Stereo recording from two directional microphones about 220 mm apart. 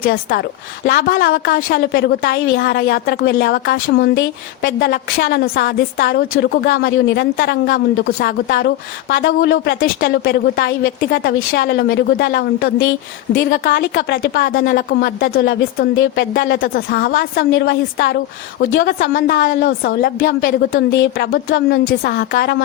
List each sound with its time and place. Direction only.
0.0 s a woman's voice: 45° left (ahead or behind); by 9.9 s 60° left (ahead or behind)
10.0 s a woman's voice: 45° left (ahead or behind)
21.3 s a woman's voice: 40° left (ahead or behind)